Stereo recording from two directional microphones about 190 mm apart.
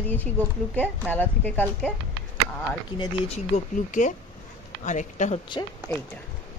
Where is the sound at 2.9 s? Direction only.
25° left (ahead or behind).